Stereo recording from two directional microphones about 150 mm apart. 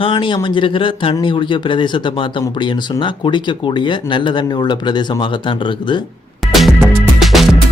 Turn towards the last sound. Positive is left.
turn(degrees=0)  # may be behind; listen again after turning